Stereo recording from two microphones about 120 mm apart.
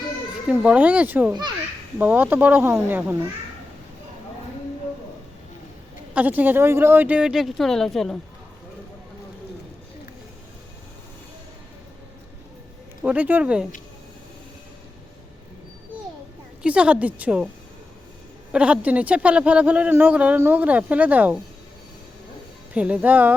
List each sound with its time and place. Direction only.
0.6 s speech: 10° right (ahead or behind)
1.3 s a child's voice: 35° right (ahead or behind)
2.0 s speech: 15° right (ahead or behind)
6.1 s speech: 15° right (ahead or behind); by 8.2 s centre (ahead or behind)
13.1 s speech: 15° right (ahead or behind)
16.6 s speech: 10° right (ahead or behind)
18.5 s speech: 10° right (ahead or behind)
22.7 s speech: 10° right (ahead or behind)